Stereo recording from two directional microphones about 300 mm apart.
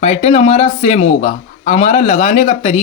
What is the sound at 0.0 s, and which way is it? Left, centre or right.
A man's voice, left.